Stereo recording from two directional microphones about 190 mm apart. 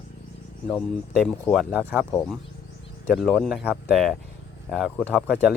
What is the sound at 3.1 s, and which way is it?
Speech, centre (ahead or behind).